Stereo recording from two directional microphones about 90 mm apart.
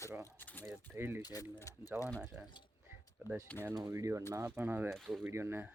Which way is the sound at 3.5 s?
15° left (ahead or behind).